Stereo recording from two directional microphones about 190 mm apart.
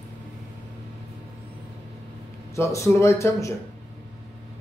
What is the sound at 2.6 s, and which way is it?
Speech, 15° left (ahead or behind).